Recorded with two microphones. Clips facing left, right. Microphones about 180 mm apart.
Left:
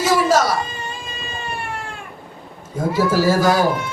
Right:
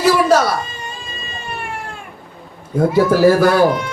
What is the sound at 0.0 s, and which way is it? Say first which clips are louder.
Cat: right 3 dB; 60° right (ahead or behind).